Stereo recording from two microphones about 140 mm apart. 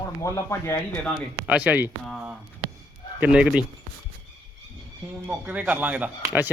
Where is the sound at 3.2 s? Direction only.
5° right (ahead or behind).